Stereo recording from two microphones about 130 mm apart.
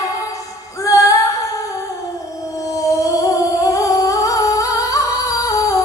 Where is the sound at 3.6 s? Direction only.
25° left (ahead or behind).